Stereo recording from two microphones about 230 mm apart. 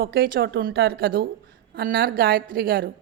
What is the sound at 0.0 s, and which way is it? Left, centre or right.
A woman's voice, right.